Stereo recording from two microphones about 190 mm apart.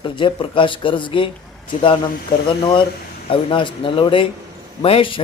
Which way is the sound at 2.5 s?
25° left (ahead or behind).